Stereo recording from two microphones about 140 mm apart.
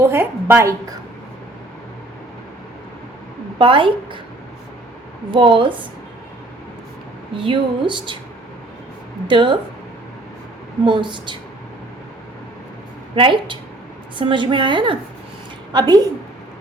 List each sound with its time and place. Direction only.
0.1 s a woman's voice: 15° right (ahead or behind)
3.6 s speech: 35° right (ahead or behind)
5.3 s speech: 40° right (ahead or behind)
7.3 s speech: 35° right (ahead or behind)
9.2 s speech: 35° right (ahead or behind)
10.8 s speech: 35° right (ahead or behind)
13.1 s a woman's voice: 35° right (ahead or behind)